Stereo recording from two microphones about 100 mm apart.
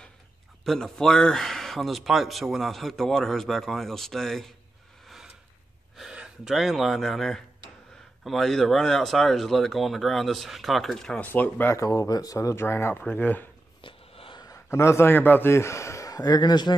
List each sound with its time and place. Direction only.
0.7 s a man's voice: 5° left (ahead or behind)
5.0 s a sound: 5° right (ahead or behind)
5.9 s a man's voice: 5° right (ahead or behind)
11.2 s speech: 15° left (ahead or behind)
11.7 s speech: 30° left (ahead or behind)
13.7 s a sound: 60° left (ahead or behind)
14.4 s a man's voice: 30° left (ahead or behind)